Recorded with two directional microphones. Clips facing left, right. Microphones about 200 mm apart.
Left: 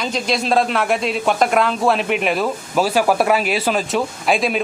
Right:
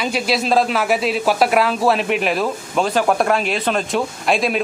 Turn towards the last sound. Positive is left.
turn(degrees=0)  # may be behind; listen again after turning